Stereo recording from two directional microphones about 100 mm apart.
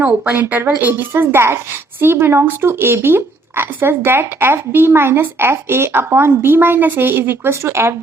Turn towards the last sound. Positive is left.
turn(degrees=-25)  # may be behind; listen again after turning